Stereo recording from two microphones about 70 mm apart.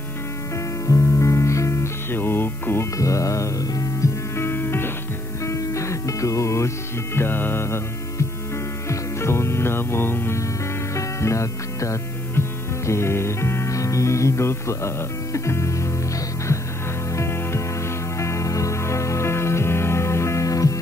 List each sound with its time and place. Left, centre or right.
0.8 s music: left
3.0 s music: left
4.4 s music: left
5.4 s music: left
7.2 s music: left
11.0 s music: left
17.1 s music: left